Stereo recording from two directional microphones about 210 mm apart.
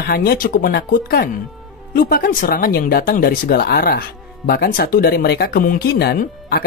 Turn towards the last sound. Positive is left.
turn(degrees=50)  # may be behind; listen again after turning